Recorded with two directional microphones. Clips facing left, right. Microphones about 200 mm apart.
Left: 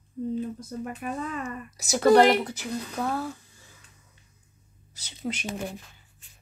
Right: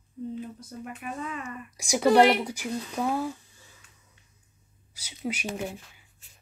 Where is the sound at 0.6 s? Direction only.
40° left (ahead or behind).